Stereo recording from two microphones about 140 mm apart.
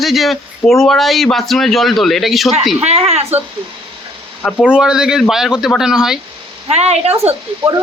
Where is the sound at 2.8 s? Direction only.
45° right (ahead or behind).